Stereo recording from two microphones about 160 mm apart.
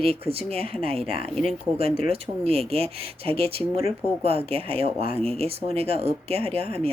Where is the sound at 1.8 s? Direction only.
40° right (ahead or behind).